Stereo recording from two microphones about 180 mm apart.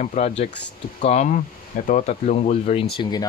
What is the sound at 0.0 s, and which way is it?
Speech, 40° left (ahead or behind).